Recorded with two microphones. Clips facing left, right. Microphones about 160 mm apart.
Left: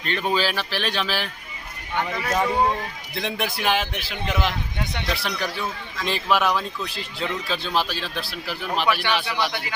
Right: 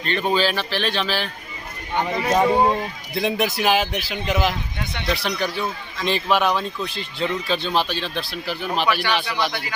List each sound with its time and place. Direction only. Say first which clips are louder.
0.0 s speech: right 3 dB; 5° left (ahead or behind)
2.0 s speech: right 4 dB; 25° right (ahead or behind)
3.2 s speech: right 6 dB; 5° right (ahead or behind)